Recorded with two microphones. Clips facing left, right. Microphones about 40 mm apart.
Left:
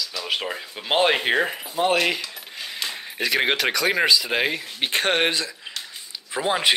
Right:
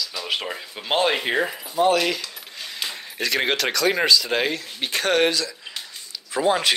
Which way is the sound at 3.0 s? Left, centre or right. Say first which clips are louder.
Left 1 dB; centre.